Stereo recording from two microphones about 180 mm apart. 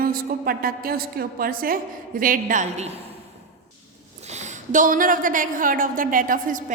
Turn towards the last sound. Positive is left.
turn(degrees=-50)  # may be behind; listen again after turning